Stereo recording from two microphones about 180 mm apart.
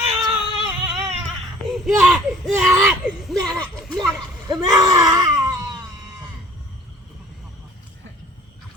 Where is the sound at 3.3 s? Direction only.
20° right (ahead or behind).